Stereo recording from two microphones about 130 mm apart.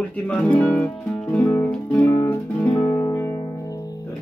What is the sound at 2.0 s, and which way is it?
Music, 20° left (ahead or behind).